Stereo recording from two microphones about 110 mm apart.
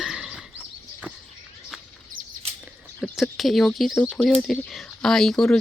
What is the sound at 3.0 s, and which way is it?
Speech, centre (ahead or behind).